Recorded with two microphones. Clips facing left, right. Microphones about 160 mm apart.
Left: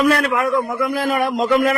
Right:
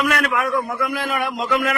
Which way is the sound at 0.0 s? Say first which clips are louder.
Left 4 dB; 30° left (ahead or behind).